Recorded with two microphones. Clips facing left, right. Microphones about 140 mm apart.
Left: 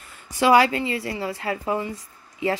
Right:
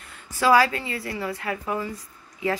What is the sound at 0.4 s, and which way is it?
A woman's voice, 25° left (ahead or behind).